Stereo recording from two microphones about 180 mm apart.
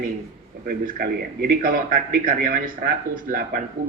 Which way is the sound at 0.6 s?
55° right (ahead or behind).